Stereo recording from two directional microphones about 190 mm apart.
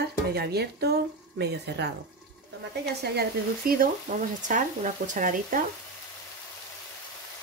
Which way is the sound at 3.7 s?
45° right (ahead or behind).